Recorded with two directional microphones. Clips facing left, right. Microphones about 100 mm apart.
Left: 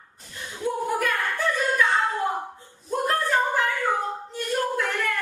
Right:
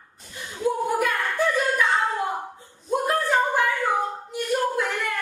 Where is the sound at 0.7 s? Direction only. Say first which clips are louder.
Right 2 dB; 15° right (ahead or behind).